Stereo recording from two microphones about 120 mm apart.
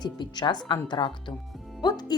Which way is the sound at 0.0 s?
40° left (ahead or behind).